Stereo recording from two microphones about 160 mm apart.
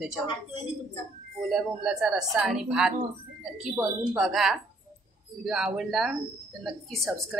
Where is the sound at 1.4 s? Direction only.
5° right (ahead or behind).